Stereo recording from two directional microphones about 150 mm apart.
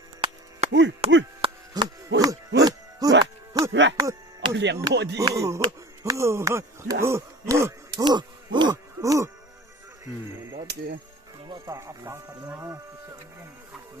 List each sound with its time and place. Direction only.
0.6 s chop: 40° right (ahead or behind)
1.7 s music: 25° right (ahead or behind)
3.5 s speech: 25° right (ahead or behind)
11.4 s speech: 25° right (ahead or behind)